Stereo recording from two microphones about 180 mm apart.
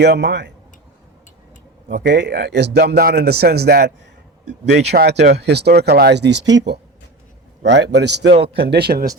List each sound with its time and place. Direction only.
0.0 s speech: 70° right (ahead or behind)
1.9 s a man's voice: 70° right (ahead or behind)